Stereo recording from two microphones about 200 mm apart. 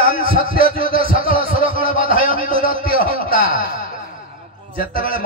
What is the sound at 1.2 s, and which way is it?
Speech, 30° right (ahead or behind).